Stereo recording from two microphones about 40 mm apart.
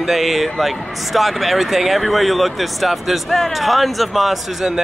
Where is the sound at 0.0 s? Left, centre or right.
Centre.